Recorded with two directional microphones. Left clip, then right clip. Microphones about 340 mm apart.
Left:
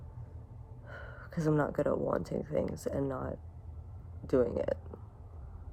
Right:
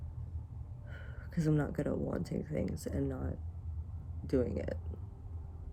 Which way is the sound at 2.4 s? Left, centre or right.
Centre.